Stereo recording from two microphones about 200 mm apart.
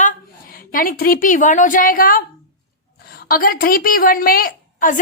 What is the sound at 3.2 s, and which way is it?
A woman's voice, 45° left (ahead or behind).